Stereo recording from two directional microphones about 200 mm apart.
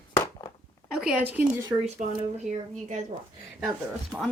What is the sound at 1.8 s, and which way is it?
Speech, 35° right (ahead or behind).